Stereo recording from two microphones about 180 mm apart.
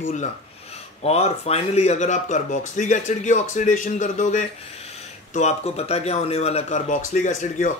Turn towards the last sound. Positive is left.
turn(degrees=45)  # may be behind; listen again after turning